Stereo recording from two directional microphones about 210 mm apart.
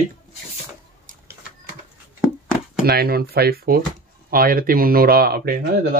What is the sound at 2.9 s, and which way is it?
Speech, 50° right (ahead or behind).